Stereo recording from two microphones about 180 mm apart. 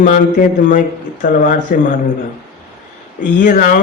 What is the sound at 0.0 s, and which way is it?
Speech, 45° left (ahead or behind).